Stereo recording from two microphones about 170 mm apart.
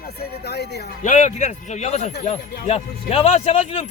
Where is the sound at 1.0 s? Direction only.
45° left (ahead or behind).